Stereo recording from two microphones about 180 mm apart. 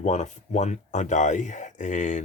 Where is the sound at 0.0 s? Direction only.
40° left (ahead or behind).